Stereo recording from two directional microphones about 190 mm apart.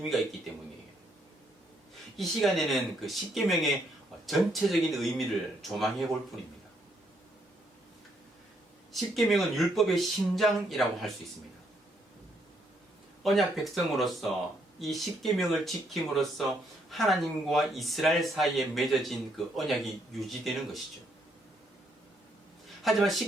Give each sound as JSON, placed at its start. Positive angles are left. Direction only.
{"t": 2.1, "sound": "speech", "side_deg": 0}
{"t": 8.9, "sound": "speech", "side_deg": 0}
{"t": 13.2, "sound": "speech", "side_deg": 0}
{"t": 22.8, "sound": "speech", "side_deg": 0}